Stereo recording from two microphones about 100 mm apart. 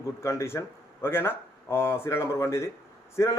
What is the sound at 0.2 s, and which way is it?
A man's voice, 25° left (ahead or behind).